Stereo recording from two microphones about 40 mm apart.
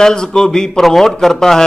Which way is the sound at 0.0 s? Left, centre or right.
Centre.